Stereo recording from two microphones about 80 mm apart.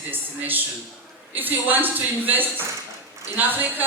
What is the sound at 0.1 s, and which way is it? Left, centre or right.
A man's voice, right.